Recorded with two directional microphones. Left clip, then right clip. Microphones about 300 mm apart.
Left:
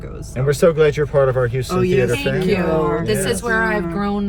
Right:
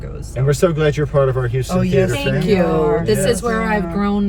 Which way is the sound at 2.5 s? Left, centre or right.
Centre.